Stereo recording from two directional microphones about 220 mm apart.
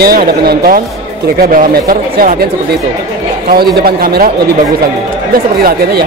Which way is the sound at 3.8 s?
45° right (ahead or behind).